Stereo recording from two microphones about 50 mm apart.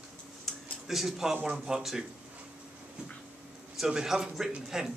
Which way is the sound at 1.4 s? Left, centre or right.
Centre.